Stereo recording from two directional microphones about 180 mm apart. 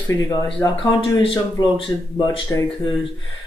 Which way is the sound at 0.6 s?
20° left (ahead or behind).